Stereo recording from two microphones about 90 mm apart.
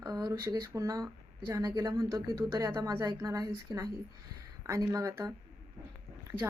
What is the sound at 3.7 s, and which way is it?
Speech, 55° right (ahead or behind).